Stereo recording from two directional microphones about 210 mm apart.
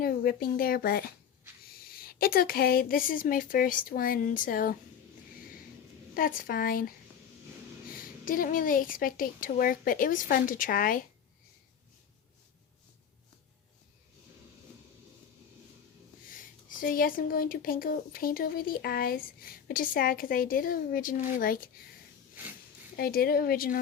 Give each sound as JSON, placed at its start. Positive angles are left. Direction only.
{"t": 0.0, "sound": "speech", "side_deg": 45}
{"t": 6.1, "sound": "speech", "side_deg": 45}
{"t": 7.9, "sound": "a woman's voice", "side_deg": 40}
{"t": 16.3, "sound": "speech", "side_deg": 40}
{"t": 23.0, "sound": "speech", "side_deg": 45}